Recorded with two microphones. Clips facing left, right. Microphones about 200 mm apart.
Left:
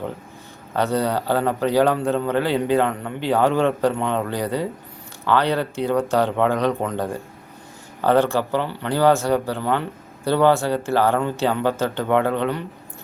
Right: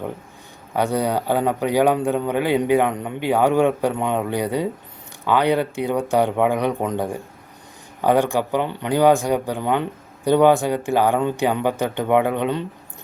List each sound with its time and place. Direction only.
0.8 s speech: 15° right (ahead or behind)